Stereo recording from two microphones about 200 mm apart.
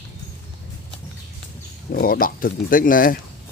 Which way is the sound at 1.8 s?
50° left (ahead or behind).